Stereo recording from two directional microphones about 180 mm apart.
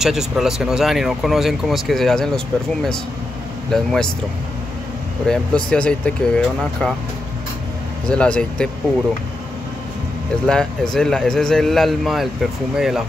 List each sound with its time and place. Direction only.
0.0 s speech: centre (ahead or behind)
5.3 s speech: 5° left (ahead or behind)
8.1 s speech: 5° left (ahead or behind)
10.4 s speech: 5° left (ahead or behind)